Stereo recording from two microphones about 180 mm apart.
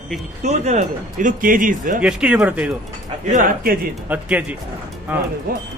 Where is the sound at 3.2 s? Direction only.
45° right (ahead or behind).